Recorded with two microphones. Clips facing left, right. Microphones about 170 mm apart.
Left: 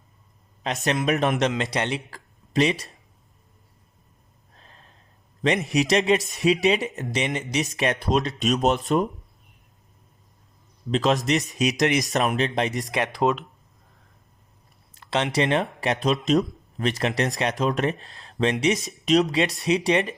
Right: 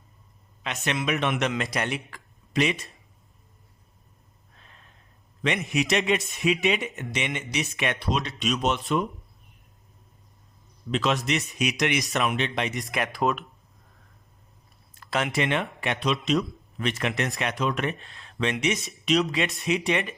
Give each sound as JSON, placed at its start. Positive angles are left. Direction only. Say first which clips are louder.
{"t": 0.6, "sound": "speech", "louder": "left 4 dB", "side_deg": 35}
{"t": 4.5, "sound": "gasp", "louder": "left 3 dB", "side_deg": 35}
{"t": 5.4, "sound": "a man's voice", "louder": "left 4 dB", "side_deg": 35}
{"t": 10.9, "sound": "speech", "louder": "left 4 dB", "side_deg": 40}
{"t": 12.9, "sound": "speech", "louder": "left 2 dB", "side_deg": 30}
{"t": 15.0, "sound": "speech", "louder": "left 3 dB", "side_deg": 25}